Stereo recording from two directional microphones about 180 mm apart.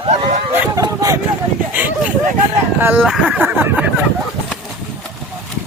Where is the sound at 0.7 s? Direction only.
20° right (ahead or behind).